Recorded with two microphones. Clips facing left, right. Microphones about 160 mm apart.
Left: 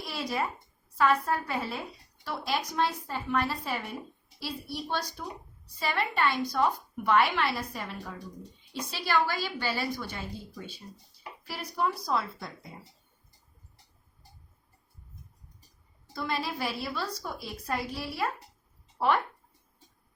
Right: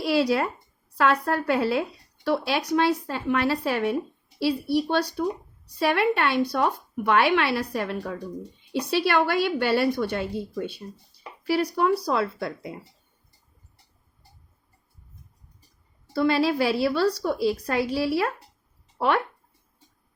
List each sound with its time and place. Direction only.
0.0 s a woman's voice: 75° right (ahead or behind)
16.1 s speech: 75° right (ahead or behind)